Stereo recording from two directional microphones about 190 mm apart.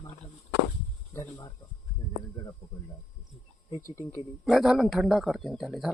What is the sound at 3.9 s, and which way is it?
Speech, 15° left (ahead or behind).